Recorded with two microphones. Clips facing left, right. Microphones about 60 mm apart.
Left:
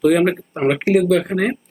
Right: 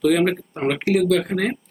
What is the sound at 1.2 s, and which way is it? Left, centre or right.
Speech, centre.